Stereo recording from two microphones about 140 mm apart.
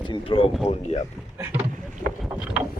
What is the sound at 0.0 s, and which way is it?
Speech, 35° left (ahead or behind).